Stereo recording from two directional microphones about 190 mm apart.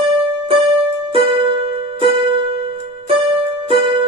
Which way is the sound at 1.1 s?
30° right (ahead or behind).